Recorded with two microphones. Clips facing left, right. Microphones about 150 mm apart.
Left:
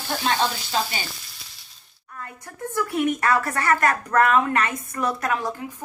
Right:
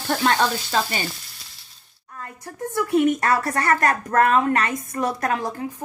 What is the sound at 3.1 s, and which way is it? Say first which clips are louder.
A woman's voice: right 1 dB; 35° right (ahead or behind).